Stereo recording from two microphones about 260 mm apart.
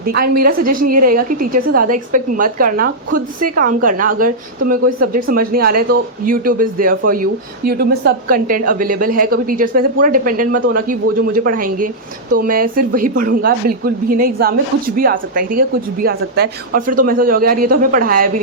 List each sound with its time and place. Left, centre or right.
0.0 s a woman's voice: right